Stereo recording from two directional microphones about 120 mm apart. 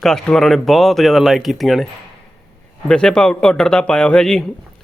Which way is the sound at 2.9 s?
5° left (ahead or behind).